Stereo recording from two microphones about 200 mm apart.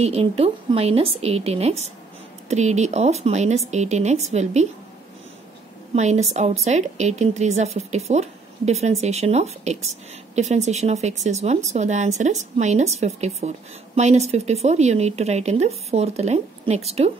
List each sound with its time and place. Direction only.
0.0 s speech: 30° right (ahead or behind)
5.9 s speech: 35° right (ahead or behind)